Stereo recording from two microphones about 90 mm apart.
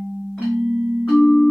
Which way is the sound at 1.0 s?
Centre (ahead or behind).